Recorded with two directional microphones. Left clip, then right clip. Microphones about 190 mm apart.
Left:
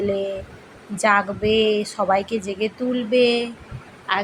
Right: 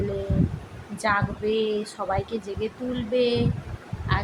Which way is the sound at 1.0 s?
25° left (ahead or behind).